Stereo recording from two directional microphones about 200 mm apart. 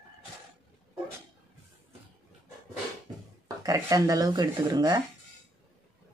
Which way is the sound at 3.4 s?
15° right (ahead or behind).